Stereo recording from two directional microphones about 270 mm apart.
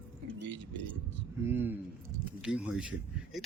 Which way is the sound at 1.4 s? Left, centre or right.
Centre.